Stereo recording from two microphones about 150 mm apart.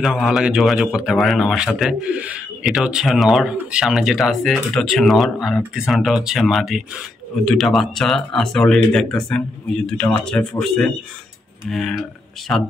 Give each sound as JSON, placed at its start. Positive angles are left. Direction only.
{"t": 0.0, "sound": "a man's voice", "side_deg": 0}
{"t": 12.5, "sound": "speech", "side_deg": 5}